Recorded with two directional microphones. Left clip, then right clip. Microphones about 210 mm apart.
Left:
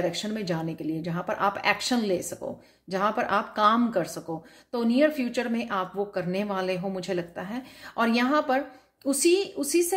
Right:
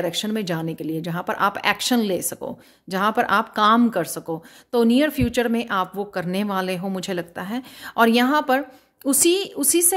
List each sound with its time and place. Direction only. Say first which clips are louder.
0.0 s speech: right 4 dB; 45° right (ahead or behind)